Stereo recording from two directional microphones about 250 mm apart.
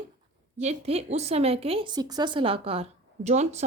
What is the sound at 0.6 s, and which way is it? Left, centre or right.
A woman's voice, right.